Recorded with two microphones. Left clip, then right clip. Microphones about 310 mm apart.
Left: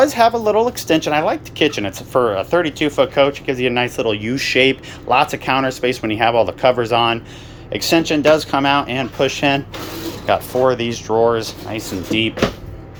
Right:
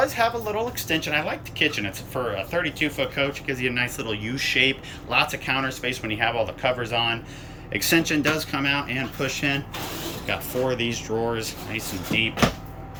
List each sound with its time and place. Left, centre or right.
0.0 s speech: centre